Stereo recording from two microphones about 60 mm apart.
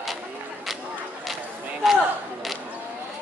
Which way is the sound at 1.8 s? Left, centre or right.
Centre.